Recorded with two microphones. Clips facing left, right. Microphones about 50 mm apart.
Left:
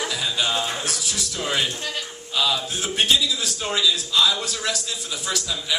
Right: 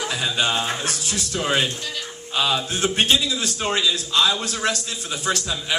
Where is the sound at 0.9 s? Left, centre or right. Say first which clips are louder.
Right 1 dB; right.